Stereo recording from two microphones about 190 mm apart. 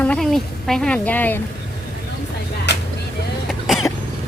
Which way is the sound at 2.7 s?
65° left (ahead or behind).